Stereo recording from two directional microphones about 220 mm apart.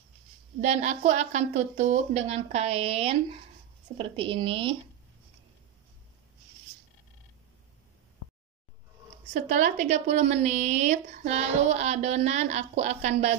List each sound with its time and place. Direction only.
0.6 s a woman's voice: 35° right (ahead or behind)
9.3 s a woman's voice: 35° right (ahead or behind)